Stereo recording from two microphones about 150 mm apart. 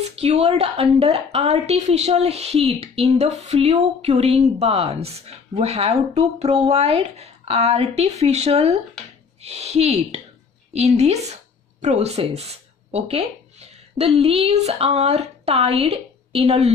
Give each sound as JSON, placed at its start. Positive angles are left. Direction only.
{"t": 0.1, "sound": "a woman's voice", "side_deg": -45}